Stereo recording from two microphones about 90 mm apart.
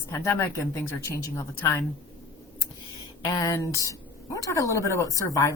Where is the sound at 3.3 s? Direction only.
40° left (ahead or behind).